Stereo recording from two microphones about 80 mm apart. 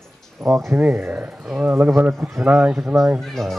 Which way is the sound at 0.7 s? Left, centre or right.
Centre.